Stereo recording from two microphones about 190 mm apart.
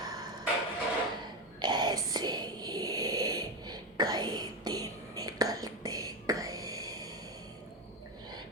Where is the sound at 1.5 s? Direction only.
25° right (ahead or behind).